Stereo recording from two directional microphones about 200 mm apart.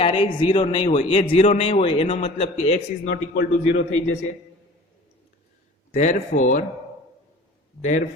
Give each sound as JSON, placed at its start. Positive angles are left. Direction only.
{"t": 0.0, "sound": "a man's voice", "side_deg": 25}
{"t": 3.1, "sound": "a man's voice", "side_deg": 55}
{"t": 5.9, "sound": "speech", "side_deg": 40}
{"t": 7.8, "sound": "speech", "side_deg": 40}